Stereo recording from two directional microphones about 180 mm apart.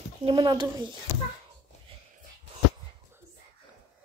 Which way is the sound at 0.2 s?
30° right (ahead or behind).